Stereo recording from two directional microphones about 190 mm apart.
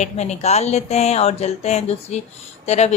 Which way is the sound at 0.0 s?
35° left (ahead or behind).